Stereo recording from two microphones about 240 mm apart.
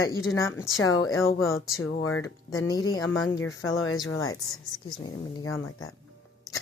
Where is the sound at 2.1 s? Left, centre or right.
Centre.